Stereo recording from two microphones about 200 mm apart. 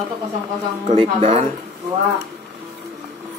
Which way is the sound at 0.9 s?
30° right (ahead or behind).